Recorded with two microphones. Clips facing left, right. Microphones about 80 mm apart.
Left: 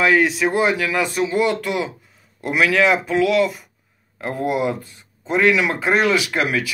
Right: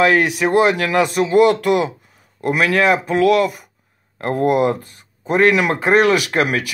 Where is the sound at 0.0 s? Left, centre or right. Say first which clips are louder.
Right 2 dB; right.